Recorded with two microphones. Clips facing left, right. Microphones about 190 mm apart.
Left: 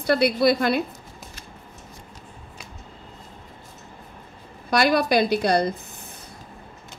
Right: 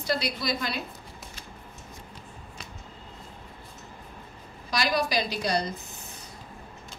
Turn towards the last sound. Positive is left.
turn(degrees=55)  # may be behind; listen again after turning